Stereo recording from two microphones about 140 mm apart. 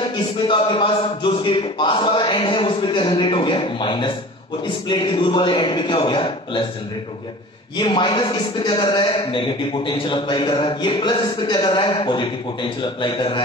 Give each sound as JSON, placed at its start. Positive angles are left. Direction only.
{"t": 0.2, "sound": "a man's voice", "side_deg": 35}
{"t": 7.7, "sound": "a man's voice", "side_deg": 35}